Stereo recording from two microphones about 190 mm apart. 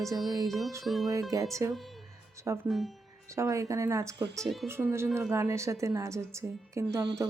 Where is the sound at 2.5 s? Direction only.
15° right (ahead or behind).